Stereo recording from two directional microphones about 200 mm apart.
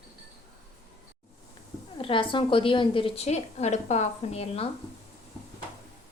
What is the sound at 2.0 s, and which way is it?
A woman's voice, 25° left (ahead or behind).